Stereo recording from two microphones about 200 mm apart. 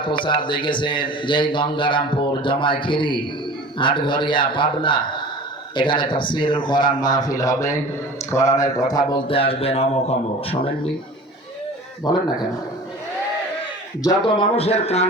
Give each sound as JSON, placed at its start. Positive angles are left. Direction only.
{"t": 0.0, "sound": "a man's voice", "side_deg": 25}
{"t": 12.1, "sound": "a man's voice", "side_deg": 20}
{"t": 14.0, "sound": "a man's voice", "side_deg": 20}